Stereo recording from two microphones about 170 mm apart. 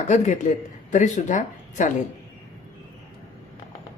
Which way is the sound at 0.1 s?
45° left (ahead or behind).